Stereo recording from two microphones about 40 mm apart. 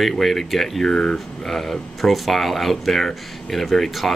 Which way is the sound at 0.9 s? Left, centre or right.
Left.